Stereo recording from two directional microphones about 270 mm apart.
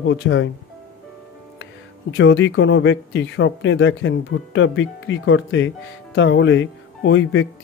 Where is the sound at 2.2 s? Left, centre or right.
Left.